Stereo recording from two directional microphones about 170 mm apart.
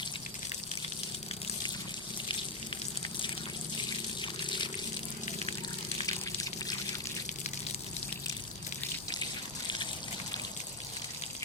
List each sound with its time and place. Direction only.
3.8 s water: 25° left (ahead or behind)
6.0 s a sound: 20° left (ahead or behind)
9.6 s trickle: 25° left (ahead or behind)